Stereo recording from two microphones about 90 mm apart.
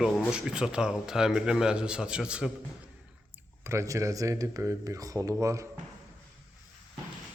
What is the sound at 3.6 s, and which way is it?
Speech, 30° right (ahead or behind).